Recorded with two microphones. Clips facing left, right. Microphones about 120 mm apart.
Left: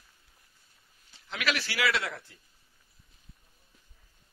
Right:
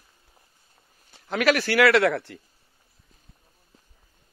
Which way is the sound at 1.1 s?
45° right (ahead or behind).